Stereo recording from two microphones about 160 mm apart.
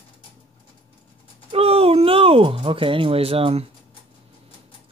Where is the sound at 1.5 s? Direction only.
35° right (ahead or behind).